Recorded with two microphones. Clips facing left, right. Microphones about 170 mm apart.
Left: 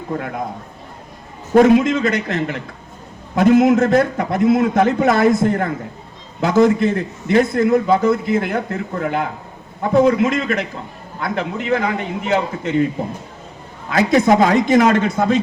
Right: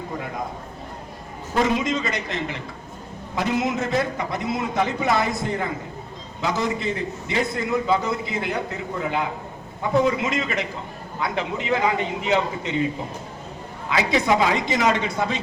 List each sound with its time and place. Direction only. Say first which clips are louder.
1.5 s a man's voice: left 10 dB; 55° left (ahead or behind)
13.9 s a man's voice: left 7 dB; 45° left (ahead or behind)